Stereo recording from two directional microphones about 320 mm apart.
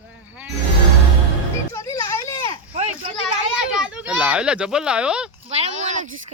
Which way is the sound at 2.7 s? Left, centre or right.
Centre.